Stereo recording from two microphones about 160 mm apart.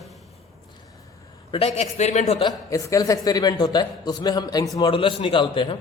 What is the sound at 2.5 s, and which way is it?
A man's voice, 20° left (ahead or behind).